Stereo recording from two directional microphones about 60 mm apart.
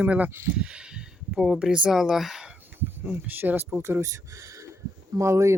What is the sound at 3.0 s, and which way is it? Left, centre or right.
Speech, right.